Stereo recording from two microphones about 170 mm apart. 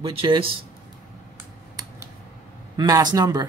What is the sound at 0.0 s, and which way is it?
Speech, 30° right (ahead or behind).